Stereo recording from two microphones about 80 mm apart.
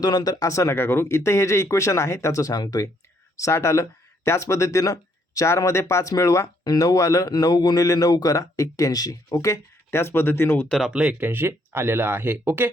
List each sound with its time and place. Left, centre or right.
0.0 s speech: left
7.3 s speech: left
10.7 s speech: centre
10.9 s speech: centre
11.2 s speech: right